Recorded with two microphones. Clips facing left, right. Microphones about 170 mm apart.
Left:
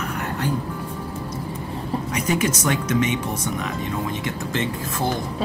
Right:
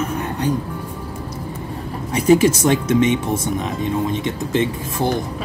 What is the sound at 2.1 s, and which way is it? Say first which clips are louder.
Speech: right 11 dB; 30° right (ahead or behind).